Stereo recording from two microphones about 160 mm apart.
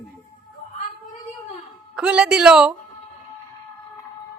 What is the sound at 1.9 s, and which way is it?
Speech, 5° right (ahead or behind).